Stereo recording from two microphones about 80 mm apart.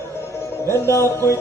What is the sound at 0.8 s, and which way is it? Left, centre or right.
Music, left.